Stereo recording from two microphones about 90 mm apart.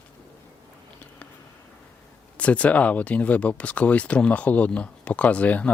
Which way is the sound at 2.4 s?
15° left (ahead or behind).